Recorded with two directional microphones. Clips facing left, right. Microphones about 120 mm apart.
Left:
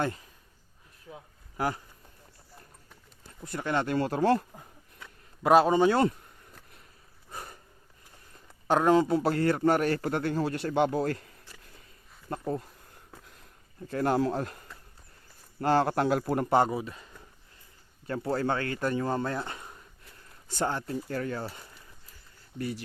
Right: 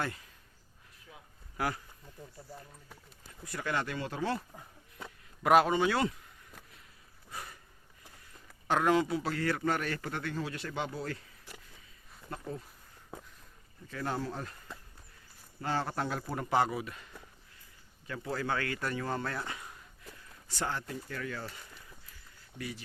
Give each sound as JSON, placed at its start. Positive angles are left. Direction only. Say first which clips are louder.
{"t": 0.0, "sound": "speech", "louder": "left 6 dB", "side_deg": 30}
{"t": 1.1, "sound": "a sound", "louder": "left 4 dB", "side_deg": 30}
{"t": 3.4, "sound": "speech", "louder": "left 5 dB", "side_deg": 25}
{"t": 3.8, "sound": "speech", "louder": "left 10 dB", "side_deg": 45}
{"t": 5.4, "sound": "speech", "louder": "left 4 dB", "side_deg": 25}
{"t": 7.3, "sound": "sniff", "louder": "left 2 dB", "side_deg": 40}
{"t": 8.6, "sound": "speech", "louder": "left 5 dB", "side_deg": 35}
{"t": 9.1, "sound": "speech", "louder": "left 7 dB", "side_deg": 50}
{"t": 9.5, "sound": "speech", "louder": "left 6 dB", "side_deg": 30}
{"t": 9.7, "sound": "speech", "louder": "left 9 dB", "side_deg": 45}
{"t": 13.8, "sound": "a man's voice", "louder": "left 9 dB", "side_deg": 55}
{"t": 15.6, "sound": "a man's voice", "louder": "left 9 dB", "side_deg": 65}
{"t": 16.6, "sound": "speech", "louder": "left 1 dB", "side_deg": 30}